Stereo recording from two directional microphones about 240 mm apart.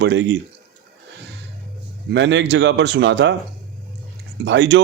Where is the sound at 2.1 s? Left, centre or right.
Right.